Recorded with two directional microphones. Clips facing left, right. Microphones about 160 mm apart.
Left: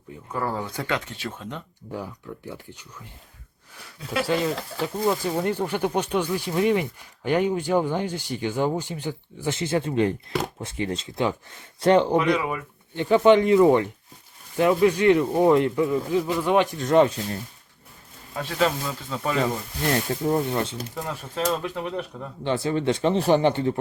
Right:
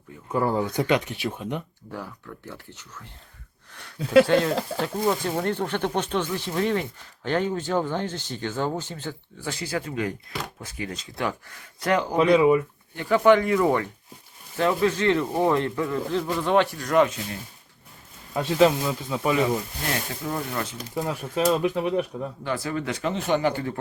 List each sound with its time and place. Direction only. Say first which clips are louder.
0.3 s speech: right 5 dB; 20° right (ahead or behind)
1.9 s speech: left 4 dB; 15° left (ahead or behind)
4.3 s speech: right 3 dB; centre (ahead or behind); by 12.1 s 30° left (ahead or behind)
12.1 s speech: right 4 dB; 30° right (ahead or behind)
13.0 s speech: left 2 dB; 20° left (ahead or behind)
18.3 s speech: right 5 dB; 20° right (ahead or behind)
20.2 s speech: left 6 dB; 30° left (ahead or behind)
20.9 s speech: right 4 dB; 10° right (ahead or behind)
22.4 s speech: left 6 dB; 25° left (ahead or behind)